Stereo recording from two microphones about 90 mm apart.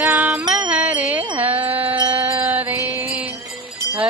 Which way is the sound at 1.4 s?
20° right (ahead or behind).